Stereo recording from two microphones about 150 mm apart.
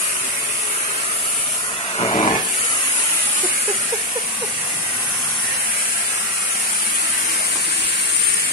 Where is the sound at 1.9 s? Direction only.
40° left (ahead or behind).